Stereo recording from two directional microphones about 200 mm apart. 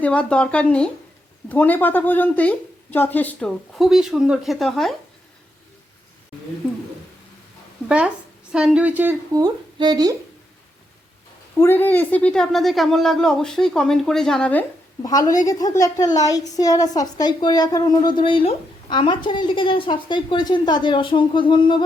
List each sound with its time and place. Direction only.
0.0 s a woman's voice: 5° left (ahead or behind)
7.9 s speech: 5° right (ahead or behind)
9.4 s speech: 20° right (ahead or behind)
11.5 s a woman's voice: 10° left (ahead or behind)
15.0 s a woman's voice: 15° left (ahead or behind)